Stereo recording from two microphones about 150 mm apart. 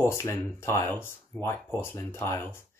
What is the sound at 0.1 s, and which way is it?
Speech, 20° left (ahead or behind).